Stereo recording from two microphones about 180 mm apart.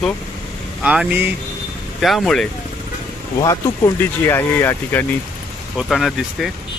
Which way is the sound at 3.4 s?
15° left (ahead or behind).